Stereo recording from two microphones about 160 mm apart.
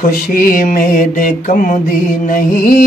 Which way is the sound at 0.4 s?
60° left (ahead or behind).